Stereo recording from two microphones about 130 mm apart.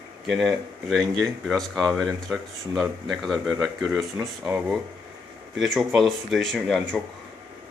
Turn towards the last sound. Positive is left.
turn(degrees=0)  # may be behind; listen again after turning